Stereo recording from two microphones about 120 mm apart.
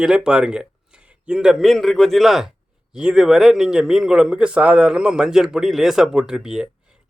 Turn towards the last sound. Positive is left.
turn(degrees=-5)  # may be behind; listen again after turning